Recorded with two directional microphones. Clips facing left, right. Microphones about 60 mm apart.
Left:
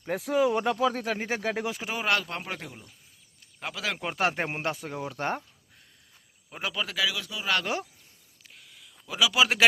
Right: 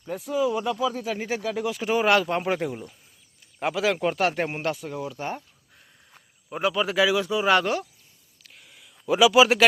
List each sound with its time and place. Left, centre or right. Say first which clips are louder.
0.0 s speech: even; left
1.1 s speech: right 2 dB; left
1.8 s speech: right 9 dB; centre
2.2 s speech: right 11 dB; centre
3.8 s speech: right 8 dB; centre
4.2 s speech: right 3 dB; left
4.7 s speech: right 3 dB; left
5.1 s speech: left 1 dB; left
6.5 s speech: right 8 dB; centre
6.8 s speech: right 8 dB; right
9.0 s a man's voice: right 8 dB; right
9.3 s speech: right 6 dB; centre